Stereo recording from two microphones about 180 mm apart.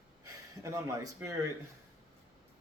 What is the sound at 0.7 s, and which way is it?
Speech, 20° right (ahead or behind).